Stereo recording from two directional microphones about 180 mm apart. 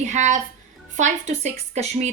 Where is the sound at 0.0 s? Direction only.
40° right (ahead or behind).